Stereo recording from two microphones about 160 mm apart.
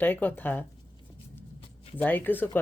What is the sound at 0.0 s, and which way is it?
Speech, 10° left (ahead or behind).